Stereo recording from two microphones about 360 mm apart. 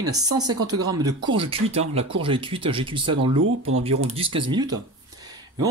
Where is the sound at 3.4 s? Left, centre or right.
Right.